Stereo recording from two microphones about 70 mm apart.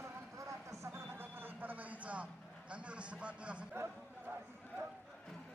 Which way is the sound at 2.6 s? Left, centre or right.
Centre.